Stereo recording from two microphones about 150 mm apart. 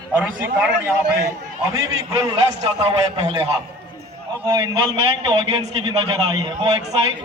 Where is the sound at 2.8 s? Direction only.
40° right (ahead or behind).